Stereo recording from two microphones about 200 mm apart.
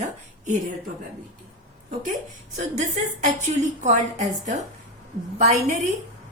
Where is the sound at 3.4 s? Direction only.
35° right (ahead or behind).